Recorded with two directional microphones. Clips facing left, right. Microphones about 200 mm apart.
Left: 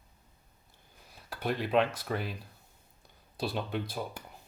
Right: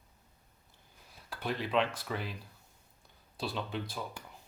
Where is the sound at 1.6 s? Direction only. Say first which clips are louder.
Left 4 dB; 45° left (ahead or behind).